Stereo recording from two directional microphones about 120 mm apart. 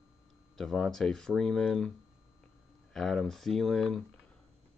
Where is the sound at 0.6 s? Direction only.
Centre (ahead or behind).